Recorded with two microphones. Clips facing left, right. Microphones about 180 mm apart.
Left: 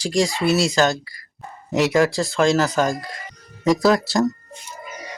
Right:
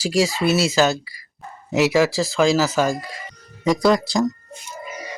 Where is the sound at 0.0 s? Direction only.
5° right (ahead or behind).